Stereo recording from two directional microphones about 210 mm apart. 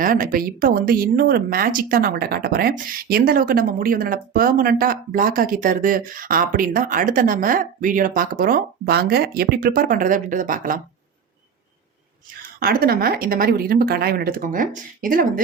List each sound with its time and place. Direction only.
0.0 s speech: 40° right (ahead or behind)
12.5 s speech: 45° right (ahead or behind)